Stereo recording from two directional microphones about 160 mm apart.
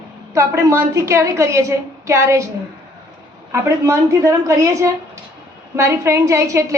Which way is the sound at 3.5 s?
20° right (ahead or behind).